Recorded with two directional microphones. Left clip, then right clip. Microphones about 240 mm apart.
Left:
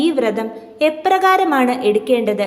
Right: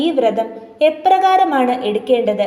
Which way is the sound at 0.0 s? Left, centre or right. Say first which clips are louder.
Right 2 dB; centre.